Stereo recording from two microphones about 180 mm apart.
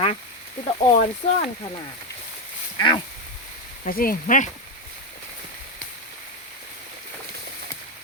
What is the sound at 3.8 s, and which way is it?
Speech, 50° left (ahead or behind).